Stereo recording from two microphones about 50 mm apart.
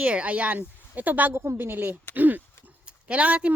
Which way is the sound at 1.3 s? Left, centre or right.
Right.